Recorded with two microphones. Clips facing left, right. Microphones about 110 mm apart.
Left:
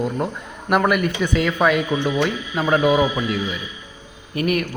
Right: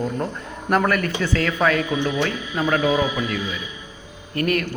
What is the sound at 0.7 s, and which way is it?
A man's voice, 10° left (ahead or behind).